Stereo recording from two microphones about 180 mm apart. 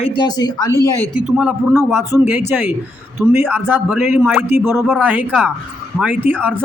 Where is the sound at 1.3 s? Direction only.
5° right (ahead or behind).